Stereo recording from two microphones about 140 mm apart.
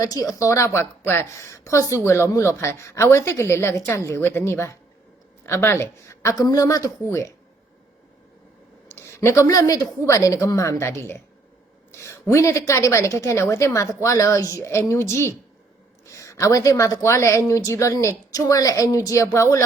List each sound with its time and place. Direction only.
0.0 s speech: 25° left (ahead or behind)
8.9 s speech: 20° left (ahead or behind)